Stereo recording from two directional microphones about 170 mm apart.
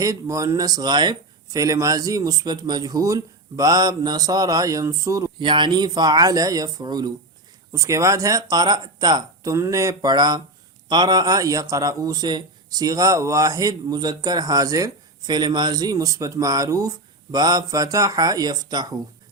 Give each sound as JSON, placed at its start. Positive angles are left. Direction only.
{"t": 0.0, "sound": "a man's voice", "side_deg": -20}